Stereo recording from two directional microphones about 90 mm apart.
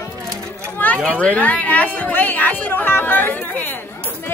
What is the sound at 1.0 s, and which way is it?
Speech, 15° left (ahead or behind).